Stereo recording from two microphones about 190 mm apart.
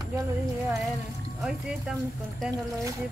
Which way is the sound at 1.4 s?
5° right (ahead or behind).